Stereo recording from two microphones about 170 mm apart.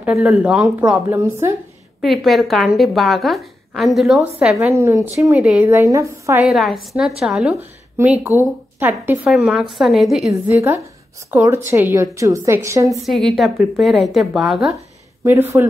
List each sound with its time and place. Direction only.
0.0 s a woman's voice: centre (ahead or behind)
2.0 s a woman's voice: centre (ahead or behind)
4.7 s a woman's voice: 15° right (ahead or behind)
6.4 s a woman's voice: centre (ahead or behind)
10.5 s a woman's voice: 15° right (ahead or behind)
13.0 s a woman's voice: centre (ahead or behind)
15.2 s a woman's voice: 10° right (ahead or behind)